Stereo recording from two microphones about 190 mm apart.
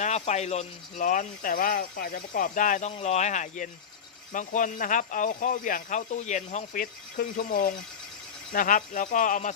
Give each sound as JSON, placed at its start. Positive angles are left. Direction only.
{"t": 0.0, "sound": "speech", "side_deg": 35}